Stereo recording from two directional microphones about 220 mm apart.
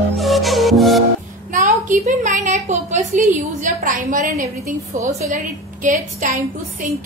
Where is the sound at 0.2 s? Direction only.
Centre (ahead or behind).